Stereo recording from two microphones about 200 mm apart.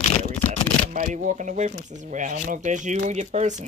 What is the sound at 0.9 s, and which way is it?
Speech, 40° right (ahead or behind).